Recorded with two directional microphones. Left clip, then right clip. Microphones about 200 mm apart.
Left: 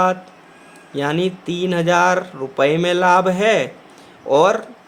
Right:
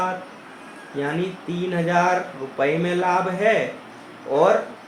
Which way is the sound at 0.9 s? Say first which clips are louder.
Left 6 dB; 40° left (ahead or behind).